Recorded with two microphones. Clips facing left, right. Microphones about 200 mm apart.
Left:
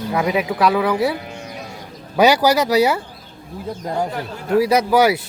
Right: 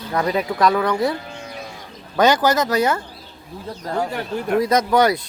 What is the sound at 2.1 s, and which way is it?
Speech, 10° left (ahead or behind).